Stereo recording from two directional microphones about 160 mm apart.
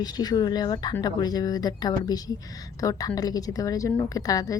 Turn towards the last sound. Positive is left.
turn(degrees=20)  # may be behind; listen again after turning